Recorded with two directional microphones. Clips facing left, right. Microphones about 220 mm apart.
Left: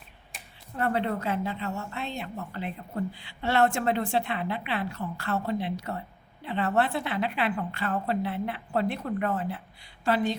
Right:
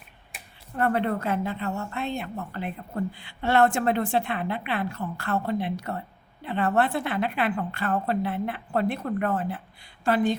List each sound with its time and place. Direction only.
0.8 s a woman's voice: 50° right (ahead or behind)